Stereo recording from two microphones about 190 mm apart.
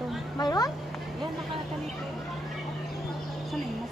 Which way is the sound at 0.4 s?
20° left (ahead or behind).